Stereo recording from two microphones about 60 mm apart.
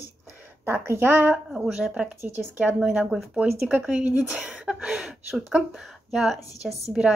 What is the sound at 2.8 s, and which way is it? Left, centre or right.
A woman's voice, centre.